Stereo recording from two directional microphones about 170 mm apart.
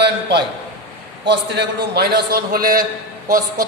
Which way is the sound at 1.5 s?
70° right (ahead or behind).